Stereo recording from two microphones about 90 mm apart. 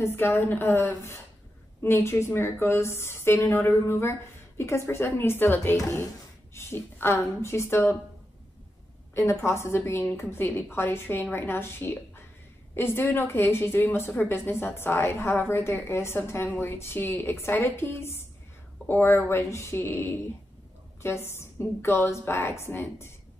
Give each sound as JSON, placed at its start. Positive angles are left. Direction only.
{"t": 0.0, "sound": "a woman's voice", "side_deg": 25}
{"t": 9.1, "sound": "a woman's voice", "side_deg": 30}